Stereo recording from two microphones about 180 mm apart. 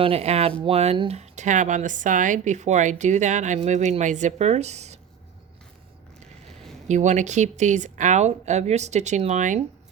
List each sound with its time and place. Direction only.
0.0 s speech: 35° right (ahead or behind)
6.8 s speech: 40° right (ahead or behind)